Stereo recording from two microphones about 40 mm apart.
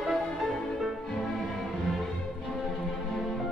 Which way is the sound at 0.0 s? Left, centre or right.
Centre.